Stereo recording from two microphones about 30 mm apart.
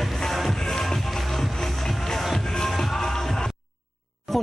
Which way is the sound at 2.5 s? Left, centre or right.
Centre.